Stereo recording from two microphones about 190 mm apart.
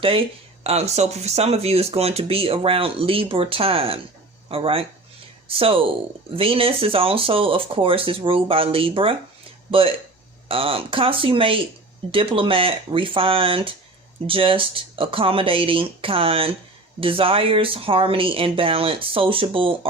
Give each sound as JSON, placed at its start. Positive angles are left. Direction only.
{"t": 0.0, "sound": "speech", "side_deg": -30}
{"t": 10.5, "sound": "speech", "side_deg": -30}